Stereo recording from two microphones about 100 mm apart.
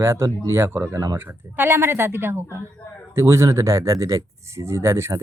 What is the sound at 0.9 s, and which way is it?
Speech, 30° right (ahead or behind).